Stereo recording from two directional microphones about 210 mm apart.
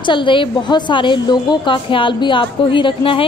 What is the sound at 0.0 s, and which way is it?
A woman's voice, 25° left (ahead or behind).